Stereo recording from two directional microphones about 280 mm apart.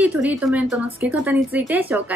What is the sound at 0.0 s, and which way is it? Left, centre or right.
A woman's voice, centre.